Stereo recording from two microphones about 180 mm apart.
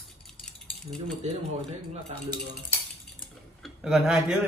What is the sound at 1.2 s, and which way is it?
Speech, 40° right (ahead or behind).